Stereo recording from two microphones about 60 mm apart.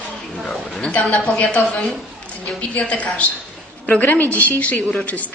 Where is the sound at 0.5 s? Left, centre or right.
Centre.